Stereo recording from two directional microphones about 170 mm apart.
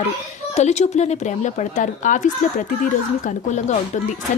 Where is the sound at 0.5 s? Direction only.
40° left (ahead or behind).